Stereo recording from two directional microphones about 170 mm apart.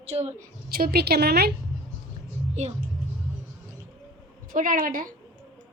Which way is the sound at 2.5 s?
40° right (ahead or behind).